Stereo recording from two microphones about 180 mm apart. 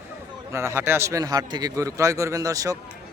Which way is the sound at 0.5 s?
15° right (ahead or behind).